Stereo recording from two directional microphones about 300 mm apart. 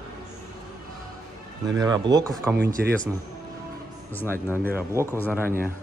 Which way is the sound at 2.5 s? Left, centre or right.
Right.